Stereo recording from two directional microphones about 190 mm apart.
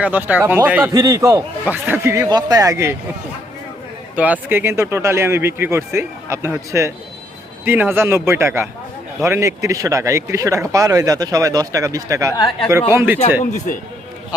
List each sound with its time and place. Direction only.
0.0 s speech: 10° right (ahead or behind)
4.1 s speech: 10° right (ahead or behind)
12.3 s speech: 20° left (ahead or behind)
12.9 s speech: 10° right (ahead or behind)